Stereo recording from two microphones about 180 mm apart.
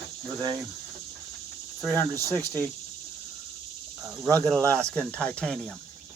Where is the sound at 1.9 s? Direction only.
10° left (ahead or behind).